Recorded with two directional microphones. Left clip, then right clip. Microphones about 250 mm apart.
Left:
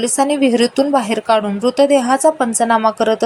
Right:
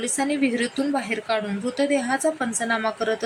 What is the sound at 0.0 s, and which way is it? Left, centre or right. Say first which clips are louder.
A woman's voice: left 9 dB; centre.